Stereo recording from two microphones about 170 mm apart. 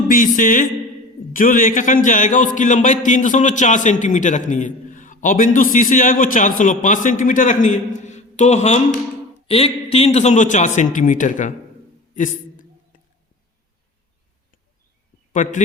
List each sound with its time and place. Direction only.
0.1 s a man's voice: 50° left (ahead or behind)
12.1 s a sound: 50° left (ahead or behind)
15.3 s a man's voice: 45° left (ahead or behind)